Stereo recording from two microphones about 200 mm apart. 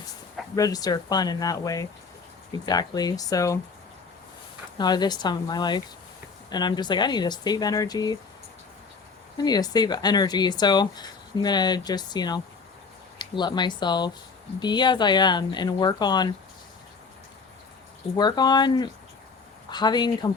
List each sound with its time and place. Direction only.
0.5 s speech: 20° left (ahead or behind)
4.8 s speech: 20° left (ahead or behind)
9.4 s speech: 20° left (ahead or behind)
18.2 s speech: 20° left (ahead or behind)